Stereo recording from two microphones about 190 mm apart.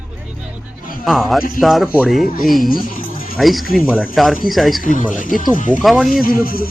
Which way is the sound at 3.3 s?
Centre (ahead or behind).